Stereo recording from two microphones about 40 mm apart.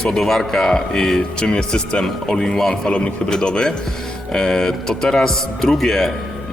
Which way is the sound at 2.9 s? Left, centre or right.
Left.